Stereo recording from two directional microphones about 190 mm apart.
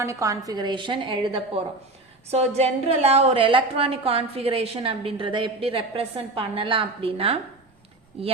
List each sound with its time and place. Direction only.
0.0 s a woman's voice: 15° right (ahead or behind)